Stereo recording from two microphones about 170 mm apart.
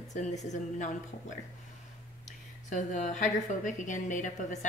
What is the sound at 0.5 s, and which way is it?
Speech, 45° left (ahead or behind).